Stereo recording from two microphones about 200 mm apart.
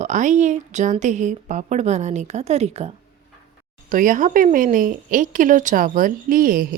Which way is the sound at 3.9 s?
40° right (ahead or behind).